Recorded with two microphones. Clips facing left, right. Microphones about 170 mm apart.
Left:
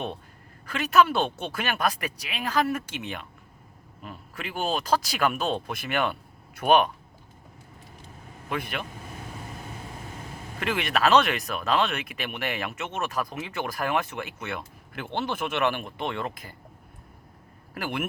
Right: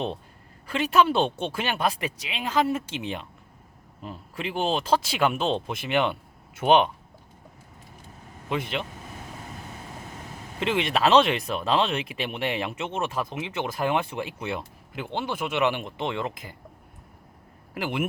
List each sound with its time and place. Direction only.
0.7 s speech: 30° right (ahead or behind)
8.4 s speech: 20° right (ahead or behind)
10.6 s speech: 25° right (ahead or behind)
14.9 s speech: 15° right (ahead or behind)
17.7 s speech: 20° right (ahead or behind)